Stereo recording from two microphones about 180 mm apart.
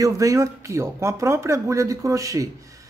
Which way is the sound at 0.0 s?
20° right (ahead or behind).